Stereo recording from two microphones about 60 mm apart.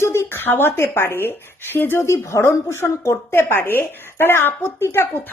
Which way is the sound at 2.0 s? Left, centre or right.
Left.